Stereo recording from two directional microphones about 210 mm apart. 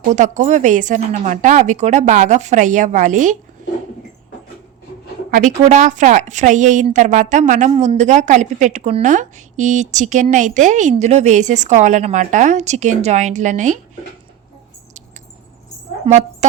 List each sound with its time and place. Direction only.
0.1 s a woman's voice: 35° right (ahead or behind)
5.3 s a woman's voice: 35° right (ahead or behind)
16.0 s a woman's voice: 35° right (ahead or behind)